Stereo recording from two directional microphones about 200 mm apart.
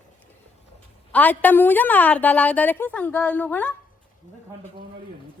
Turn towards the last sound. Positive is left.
turn(degrees=5)  # may be behind; listen again after turning